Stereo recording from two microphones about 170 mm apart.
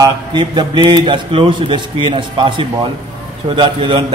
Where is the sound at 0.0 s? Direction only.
25° right (ahead or behind).